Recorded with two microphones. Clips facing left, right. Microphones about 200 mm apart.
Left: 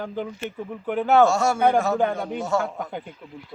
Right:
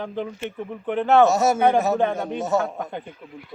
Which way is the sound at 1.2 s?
20° right (ahead or behind).